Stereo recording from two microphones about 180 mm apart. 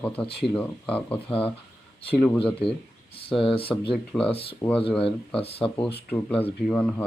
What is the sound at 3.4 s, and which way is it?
Speech, 30° left (ahead or behind).